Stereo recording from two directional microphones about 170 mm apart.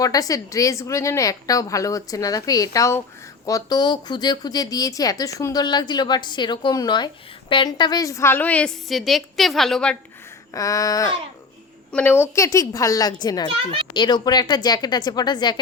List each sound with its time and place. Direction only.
0.0 s a woman's voice: 20° left (ahead or behind); by 10.0 s 5° left (ahead or behind)
10.5 s a woman's voice: 20° left (ahead or behind)
11.9 s a woman's voice: 10° left (ahead or behind)